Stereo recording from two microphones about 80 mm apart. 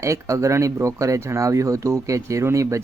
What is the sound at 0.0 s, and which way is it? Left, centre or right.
Speech, right.